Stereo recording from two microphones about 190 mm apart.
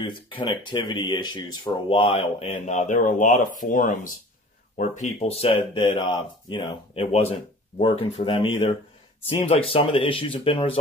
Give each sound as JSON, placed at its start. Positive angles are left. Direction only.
{"t": 0.0, "sound": "speech", "side_deg": 25}
{"t": 2.6, "sound": "speech", "side_deg": 45}